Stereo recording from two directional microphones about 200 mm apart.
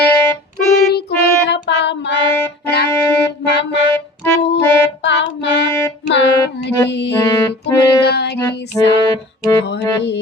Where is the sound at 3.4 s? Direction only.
60° left (ahead or behind).